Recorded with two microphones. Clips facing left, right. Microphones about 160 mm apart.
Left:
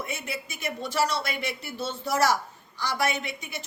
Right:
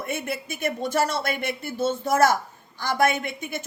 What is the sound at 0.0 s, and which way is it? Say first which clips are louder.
Speech: right 5 dB; 55° right (ahead or behind).